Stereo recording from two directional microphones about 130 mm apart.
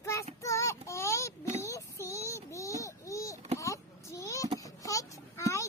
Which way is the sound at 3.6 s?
25° left (ahead or behind).